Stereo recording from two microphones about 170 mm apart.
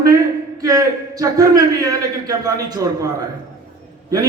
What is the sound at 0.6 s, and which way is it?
A man's voice, 20° right (ahead or behind).